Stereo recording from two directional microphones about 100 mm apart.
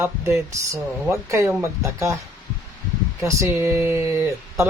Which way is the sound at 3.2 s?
30° right (ahead or behind).